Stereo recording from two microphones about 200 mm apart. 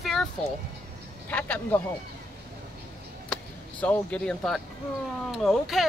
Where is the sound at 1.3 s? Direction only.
10° left (ahead or behind).